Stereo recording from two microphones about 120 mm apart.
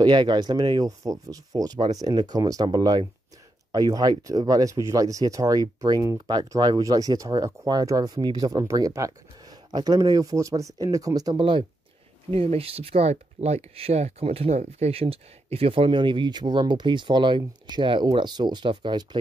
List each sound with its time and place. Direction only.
0.0 s speech: 40° right (ahead or behind)
11.3 s speech: 45° right (ahead or behind)
12.3 s speech: 55° right (ahead or behind)